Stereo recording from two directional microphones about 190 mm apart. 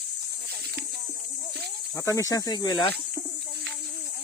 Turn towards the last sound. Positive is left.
turn(degrees=25)  # may be behind; listen again after turning